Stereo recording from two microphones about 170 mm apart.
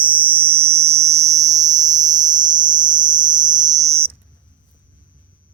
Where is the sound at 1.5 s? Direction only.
45° right (ahead or behind).